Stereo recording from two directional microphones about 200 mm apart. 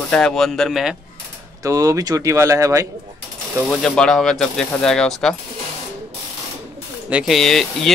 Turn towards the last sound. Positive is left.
turn(degrees=0)  # may be behind; listen again after turning